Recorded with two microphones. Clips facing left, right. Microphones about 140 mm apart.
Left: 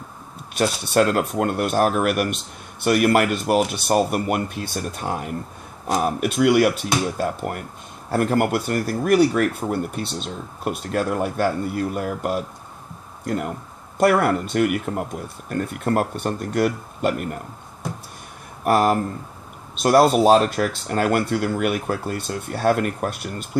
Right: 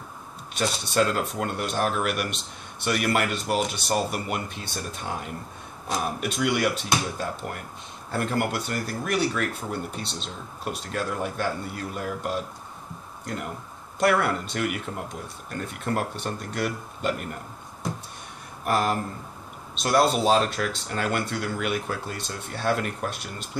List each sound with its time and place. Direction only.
0.6 s speech: 55° left (ahead or behind)
13.9 s speech: 50° left (ahead or behind)
18.6 s speech: 55° left (ahead or behind)